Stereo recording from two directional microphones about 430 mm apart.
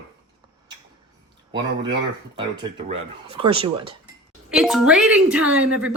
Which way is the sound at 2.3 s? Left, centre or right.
Centre.